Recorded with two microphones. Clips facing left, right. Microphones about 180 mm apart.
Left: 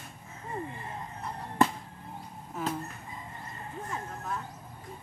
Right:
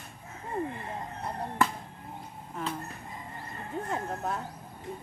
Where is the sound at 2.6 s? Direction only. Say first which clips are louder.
Left 2 dB; 5° left (ahead or behind).